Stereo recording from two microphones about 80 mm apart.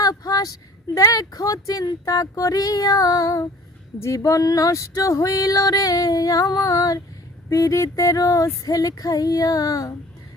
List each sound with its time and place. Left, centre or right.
0.0 s speech: left